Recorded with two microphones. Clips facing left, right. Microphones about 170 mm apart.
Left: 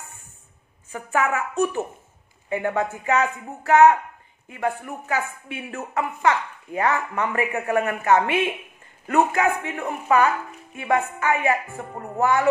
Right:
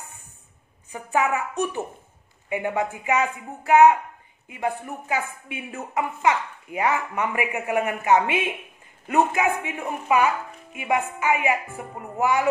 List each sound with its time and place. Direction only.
0.9 s a woman's voice: 15° right (ahead or behind)